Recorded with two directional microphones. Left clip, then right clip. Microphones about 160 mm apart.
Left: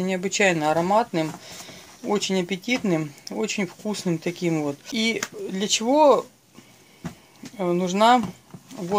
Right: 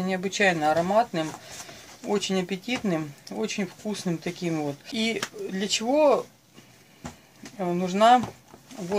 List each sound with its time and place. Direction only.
0.0 s speech: 40° left (ahead or behind)
7.5 s speech: 35° left (ahead or behind)